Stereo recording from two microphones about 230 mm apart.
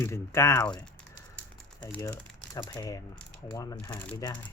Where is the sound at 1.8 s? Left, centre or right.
Centre.